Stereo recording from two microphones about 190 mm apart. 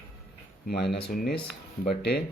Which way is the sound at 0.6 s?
60° left (ahead or behind).